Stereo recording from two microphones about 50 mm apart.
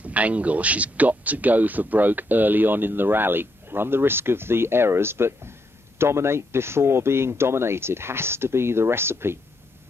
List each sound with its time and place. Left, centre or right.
0.0 s speech: right